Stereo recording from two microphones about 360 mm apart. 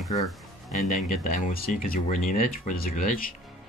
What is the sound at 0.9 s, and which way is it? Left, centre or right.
Speech, left.